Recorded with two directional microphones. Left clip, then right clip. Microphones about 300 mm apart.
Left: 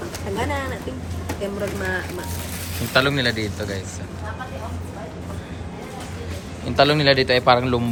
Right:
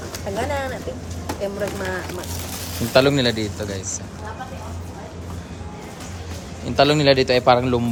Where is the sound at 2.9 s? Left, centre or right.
Centre.